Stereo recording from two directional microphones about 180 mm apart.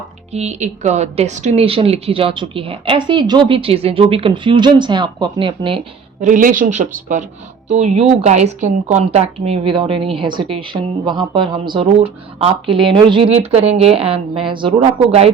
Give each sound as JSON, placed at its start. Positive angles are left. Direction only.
{"t": 0.3, "sound": "speech", "side_deg": -40}
{"t": 6.1, "sound": "speech", "side_deg": -45}